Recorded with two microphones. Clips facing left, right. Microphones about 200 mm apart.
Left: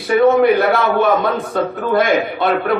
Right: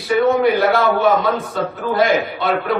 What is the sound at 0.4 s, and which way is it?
A man's voice, 55° left (ahead or behind).